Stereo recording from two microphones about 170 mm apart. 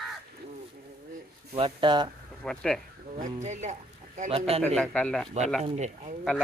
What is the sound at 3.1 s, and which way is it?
A man's voice, 45° right (ahead or behind).